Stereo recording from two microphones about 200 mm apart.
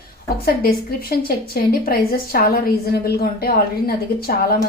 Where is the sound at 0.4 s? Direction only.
50° left (ahead or behind).